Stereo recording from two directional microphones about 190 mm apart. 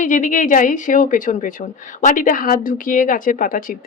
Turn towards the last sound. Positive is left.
turn(degrees=45)  # may be behind; listen again after turning